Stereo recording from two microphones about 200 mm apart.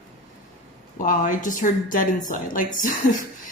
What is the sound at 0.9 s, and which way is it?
A woman's voice, 40° left (ahead or behind).